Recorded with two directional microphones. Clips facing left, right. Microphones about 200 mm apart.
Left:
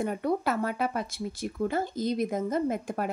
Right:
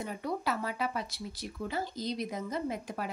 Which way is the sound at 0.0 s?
55° left (ahead or behind).